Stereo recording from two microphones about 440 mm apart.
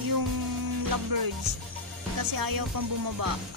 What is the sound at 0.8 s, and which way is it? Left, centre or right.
Speech, right.